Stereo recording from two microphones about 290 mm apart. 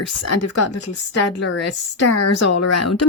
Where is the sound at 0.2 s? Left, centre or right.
Left.